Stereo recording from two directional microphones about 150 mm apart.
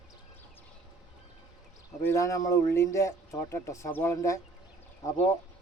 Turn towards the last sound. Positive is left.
turn(degrees=20)  # may be behind; listen again after turning